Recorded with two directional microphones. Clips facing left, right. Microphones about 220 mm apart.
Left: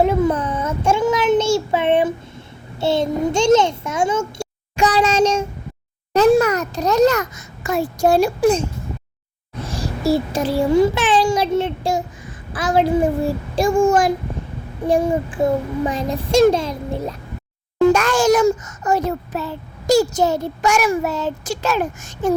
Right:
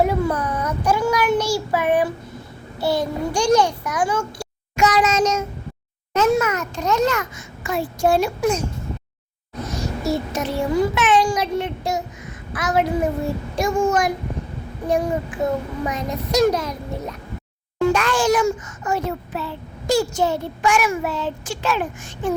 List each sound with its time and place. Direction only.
0.0 s child singing: 25° left (ahead or behind)
2.7 s a child's voice: 25° left (ahead or behind)
9.6 s a child's voice: 30° left (ahead or behind)
17.9 s a child's voice: 45° left (ahead or behind)